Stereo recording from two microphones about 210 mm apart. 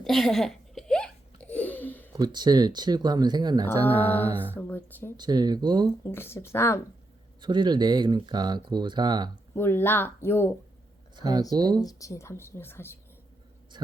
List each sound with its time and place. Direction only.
0.0 s a sound: centre (ahead or behind)
2.1 s speech: 20° right (ahead or behind)
3.7 s speech: 10° left (ahead or behind)
5.1 s speech: 20° right (ahead or behind)
6.1 s speech: 10° left (ahead or behind)
7.4 s speech: 20° right (ahead or behind)
9.6 s speech: 10° left (ahead or behind)
11.2 s speech: 20° right (ahead or behind)
11.8 s speech: 15° left (ahead or behind)
13.7 s speech: 20° right (ahead or behind)